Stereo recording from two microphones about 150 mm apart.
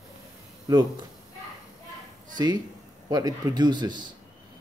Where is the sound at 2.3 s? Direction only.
25° right (ahead or behind).